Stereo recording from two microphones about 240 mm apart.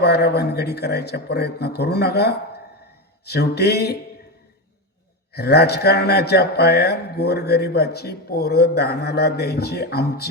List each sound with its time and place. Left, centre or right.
0.0 s a man's voice: left
5.3 s a man's voice: left